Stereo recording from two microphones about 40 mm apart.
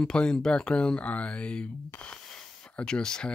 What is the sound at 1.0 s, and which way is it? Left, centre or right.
Speech, left.